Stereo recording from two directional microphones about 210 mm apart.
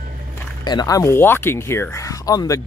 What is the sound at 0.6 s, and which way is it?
Speech, 20° left (ahead or behind).